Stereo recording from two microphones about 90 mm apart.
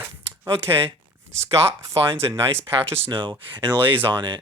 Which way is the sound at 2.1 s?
25° right (ahead or behind).